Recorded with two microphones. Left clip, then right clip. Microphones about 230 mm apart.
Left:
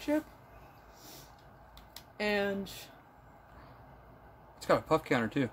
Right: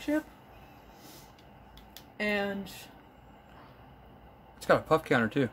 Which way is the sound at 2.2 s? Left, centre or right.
Centre.